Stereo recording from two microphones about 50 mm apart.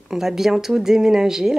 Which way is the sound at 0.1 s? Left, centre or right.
Centre.